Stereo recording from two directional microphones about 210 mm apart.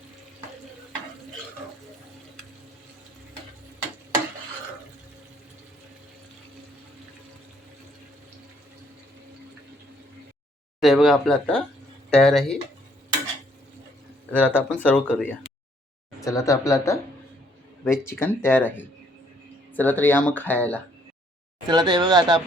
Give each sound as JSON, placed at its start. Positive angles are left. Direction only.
{"t": 10.8, "sound": "speech", "side_deg": 0}
{"t": 14.3, "sound": "speech", "side_deg": 5}
{"t": 21.7, "sound": "speech", "side_deg": -20}